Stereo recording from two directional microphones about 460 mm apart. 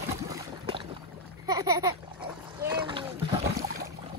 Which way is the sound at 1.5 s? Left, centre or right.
Centre.